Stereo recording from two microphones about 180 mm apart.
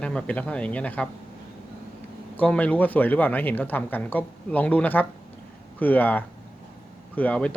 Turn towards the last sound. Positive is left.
turn(degrees=5)  # may be behind; listen again after turning